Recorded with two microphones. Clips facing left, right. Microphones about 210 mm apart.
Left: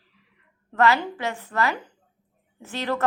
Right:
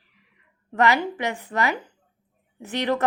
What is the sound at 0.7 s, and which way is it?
Speech, 15° right (ahead or behind).